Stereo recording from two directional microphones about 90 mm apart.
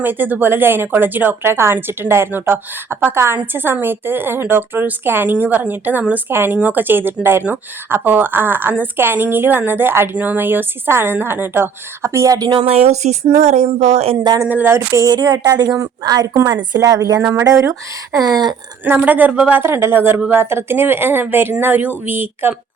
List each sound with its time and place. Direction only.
0.0 s a woman's voice: 20° right (ahead or behind); by 12.5 s 35° right (ahead or behind)
12.5 s speech: 90° right
14.4 s a woman's voice: 20° right (ahead or behind)
14.9 s a woman's voice: 50° right (ahead or behind)
17.2 s a woman's voice: 30° right (ahead or behind)
17.4 s speech: 40° right (ahead or behind)
18.9 s a woman's voice: 20° right (ahead or behind)